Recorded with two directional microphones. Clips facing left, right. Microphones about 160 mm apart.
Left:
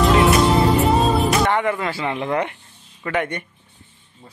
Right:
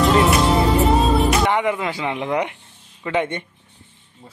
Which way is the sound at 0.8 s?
Centre (ahead or behind).